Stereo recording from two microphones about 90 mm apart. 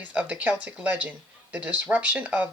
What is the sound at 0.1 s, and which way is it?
Speech, 15° right (ahead or behind).